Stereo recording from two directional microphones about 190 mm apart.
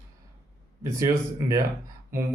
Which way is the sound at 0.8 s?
15° right (ahead or behind).